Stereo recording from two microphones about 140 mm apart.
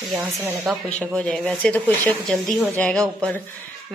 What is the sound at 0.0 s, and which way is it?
Speech, 5° right (ahead or behind).